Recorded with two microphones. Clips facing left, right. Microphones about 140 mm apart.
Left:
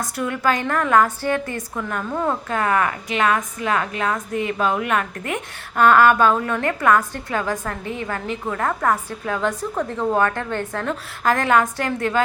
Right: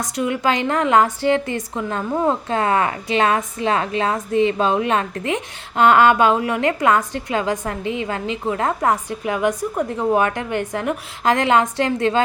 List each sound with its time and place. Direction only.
0.0 s a woman's voice: 20° right (ahead or behind)